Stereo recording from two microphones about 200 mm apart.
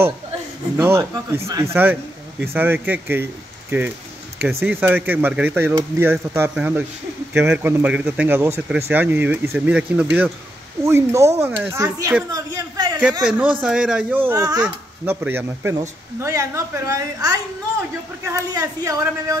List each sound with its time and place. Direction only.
0.7 s speech: 10° right (ahead or behind)
4.4 s speech: centre (ahead or behind); by 13.0 s 20° right (ahead or behind)
13.2 s speech: 5° right (ahead or behind)